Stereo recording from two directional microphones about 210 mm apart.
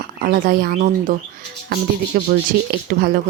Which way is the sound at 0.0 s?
45° right (ahead or behind).